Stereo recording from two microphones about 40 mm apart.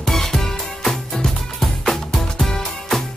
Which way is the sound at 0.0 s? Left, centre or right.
Centre.